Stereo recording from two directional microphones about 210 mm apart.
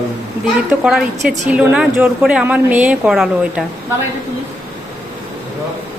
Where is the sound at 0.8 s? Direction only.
Centre (ahead or behind).